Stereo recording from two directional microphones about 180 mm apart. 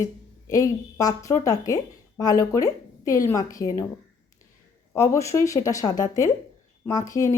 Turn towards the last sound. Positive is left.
turn(degrees=20)  # may be behind; listen again after turning